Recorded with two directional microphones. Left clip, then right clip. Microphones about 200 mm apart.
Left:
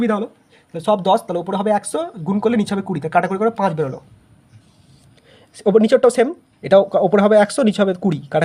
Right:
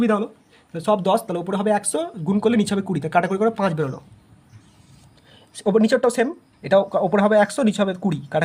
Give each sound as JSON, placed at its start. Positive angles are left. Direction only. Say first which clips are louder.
{"t": 0.0, "sound": "speech", "louder": "left 1 dB", "side_deg": 5}
{"t": 5.3, "sound": "speech", "louder": "left 5 dB", "side_deg": 15}